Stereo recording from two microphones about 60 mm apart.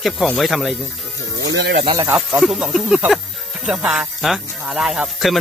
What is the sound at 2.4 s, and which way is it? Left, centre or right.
Speech, centre.